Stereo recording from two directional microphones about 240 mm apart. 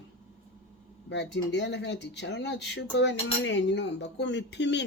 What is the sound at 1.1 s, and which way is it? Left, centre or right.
Speech, left.